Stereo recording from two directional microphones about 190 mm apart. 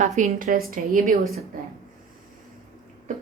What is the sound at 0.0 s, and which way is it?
A woman's voice, 40° right (ahead or behind).